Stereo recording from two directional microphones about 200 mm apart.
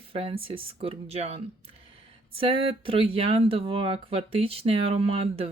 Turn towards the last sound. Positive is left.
turn(degrees=-30)  # may be behind; listen again after turning